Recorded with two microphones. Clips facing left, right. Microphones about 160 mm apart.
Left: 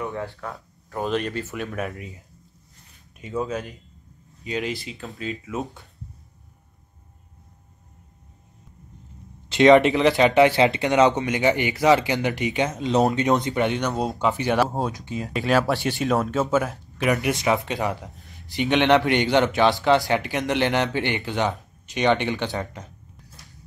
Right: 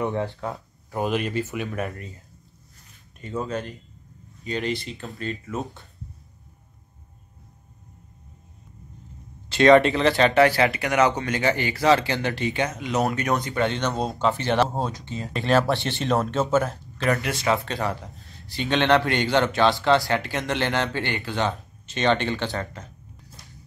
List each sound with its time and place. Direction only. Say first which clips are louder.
0.0 s speech: right 4 dB; 20° right (ahead or behind); by 2.1 s centre (ahead or behind)
3.2 s speech: left 1 dB; 5° left (ahead or behind)
9.5 s speech: left 1 dB; 20° left (ahead or behind)
17.0 s speech: left 2 dB; 15° left (ahead or behind)